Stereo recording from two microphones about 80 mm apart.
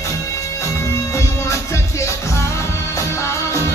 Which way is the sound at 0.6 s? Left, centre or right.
Left.